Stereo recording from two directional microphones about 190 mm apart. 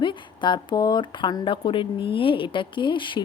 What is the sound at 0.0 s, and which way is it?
Speech, 25° left (ahead or behind).